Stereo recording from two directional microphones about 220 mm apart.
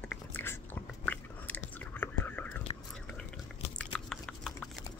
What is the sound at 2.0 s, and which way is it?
Whispering, 10° left (ahead or behind).